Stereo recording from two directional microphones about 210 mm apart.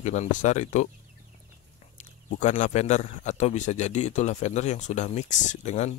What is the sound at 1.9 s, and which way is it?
Speech, 35° left (ahead or behind).